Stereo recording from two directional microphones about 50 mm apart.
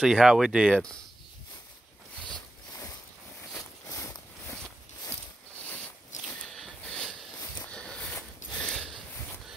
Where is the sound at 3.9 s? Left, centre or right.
Left.